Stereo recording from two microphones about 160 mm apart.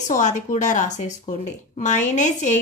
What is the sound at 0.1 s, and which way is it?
A woman's voice, 50° left (ahead or behind).